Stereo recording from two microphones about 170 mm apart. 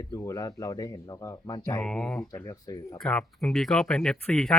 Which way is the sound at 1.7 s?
5° left (ahead or behind).